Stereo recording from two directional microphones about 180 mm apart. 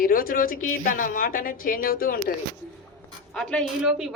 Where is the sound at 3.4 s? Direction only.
5° left (ahead or behind).